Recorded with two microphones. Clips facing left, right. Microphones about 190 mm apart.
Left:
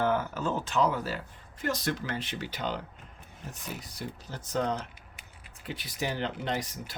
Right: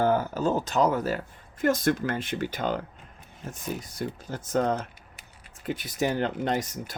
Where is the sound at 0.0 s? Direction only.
35° right (ahead or behind).